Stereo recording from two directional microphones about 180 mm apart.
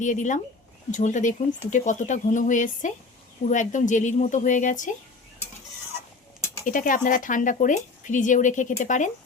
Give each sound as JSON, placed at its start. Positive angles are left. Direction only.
{"t": 0.0, "sound": "speech", "side_deg": 45}
{"t": 6.7, "sound": "speech", "side_deg": 50}